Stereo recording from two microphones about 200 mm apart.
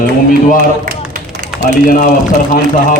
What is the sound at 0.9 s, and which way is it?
Clapping, 45° right (ahead or behind).